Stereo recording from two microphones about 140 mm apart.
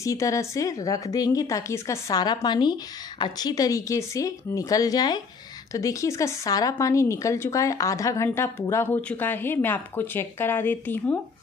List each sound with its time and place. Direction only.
0.0 s a woman's voice: 20° left (ahead or behind)